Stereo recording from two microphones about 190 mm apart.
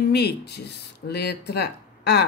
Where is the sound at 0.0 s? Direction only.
60° left (ahead or behind).